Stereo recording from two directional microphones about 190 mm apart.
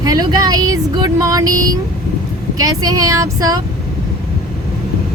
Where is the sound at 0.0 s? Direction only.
20° right (ahead or behind).